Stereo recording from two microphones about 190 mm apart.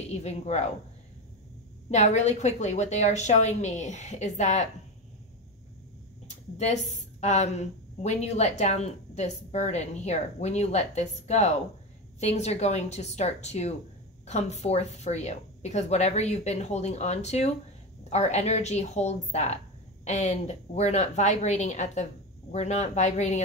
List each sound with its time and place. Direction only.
0.1 s a woman's voice: 35° left (ahead or behind)
1.9 s a woman's voice: 35° left (ahead or behind)
6.2 s a woman's voice: 40° left (ahead or behind)